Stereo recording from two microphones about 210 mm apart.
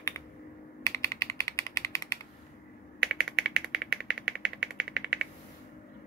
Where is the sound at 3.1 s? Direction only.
5° right (ahead or behind).